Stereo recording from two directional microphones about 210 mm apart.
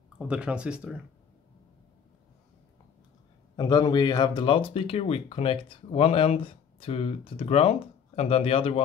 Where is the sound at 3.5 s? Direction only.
20° left (ahead or behind).